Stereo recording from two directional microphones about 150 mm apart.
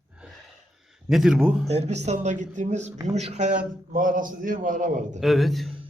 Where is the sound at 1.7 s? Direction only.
45° right (ahead or behind).